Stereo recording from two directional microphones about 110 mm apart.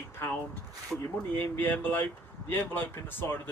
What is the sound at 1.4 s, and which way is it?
Speech, 20° left (ahead or behind).